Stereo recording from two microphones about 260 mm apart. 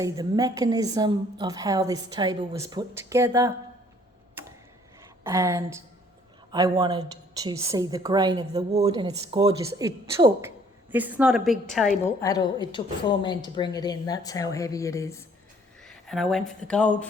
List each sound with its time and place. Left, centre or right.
0.0 s a woman's voice: centre
5.2 s a woman's voice: centre
12.2 s a woman's voice: centre
15.8 s a sound: centre
16.6 s a woman's voice: centre